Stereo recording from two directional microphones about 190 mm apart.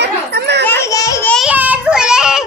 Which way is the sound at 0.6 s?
15° left (ahead or behind).